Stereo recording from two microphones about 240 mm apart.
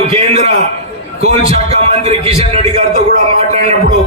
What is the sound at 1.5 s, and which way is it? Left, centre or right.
A man's voice, right.